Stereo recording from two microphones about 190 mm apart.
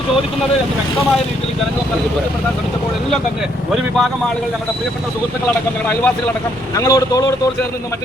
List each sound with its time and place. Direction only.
6.7 s speech: 15° left (ahead or behind)